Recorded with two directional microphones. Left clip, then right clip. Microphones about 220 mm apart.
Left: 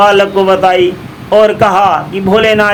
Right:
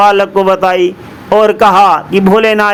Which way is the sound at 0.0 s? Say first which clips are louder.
Even; 20° right (ahead or behind).